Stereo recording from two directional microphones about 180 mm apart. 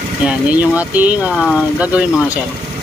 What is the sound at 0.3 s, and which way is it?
Speech, 10° right (ahead or behind).